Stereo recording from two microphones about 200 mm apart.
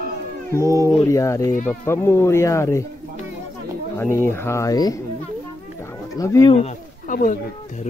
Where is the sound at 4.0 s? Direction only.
10° left (ahead or behind).